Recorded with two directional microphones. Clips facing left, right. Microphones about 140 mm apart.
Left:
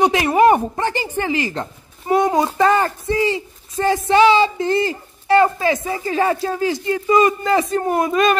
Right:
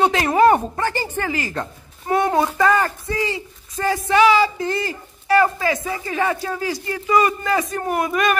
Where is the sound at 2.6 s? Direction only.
25° left (ahead or behind).